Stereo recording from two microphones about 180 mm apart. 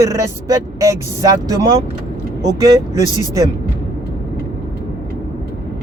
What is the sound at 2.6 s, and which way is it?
Speech, 20° right (ahead or behind).